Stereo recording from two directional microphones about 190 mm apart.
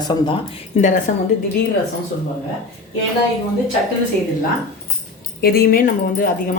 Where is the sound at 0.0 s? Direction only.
25° left (ahead or behind).